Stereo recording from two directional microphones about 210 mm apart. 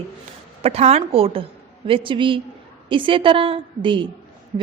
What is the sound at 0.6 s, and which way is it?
A woman's voice, 30° right (ahead or behind).